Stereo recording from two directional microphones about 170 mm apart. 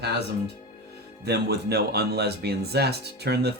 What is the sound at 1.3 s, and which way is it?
A man's voice, 70° right (ahead or behind).